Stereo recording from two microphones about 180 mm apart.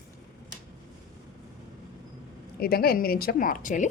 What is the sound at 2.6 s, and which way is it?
A woman's voice, 60° left (ahead or behind).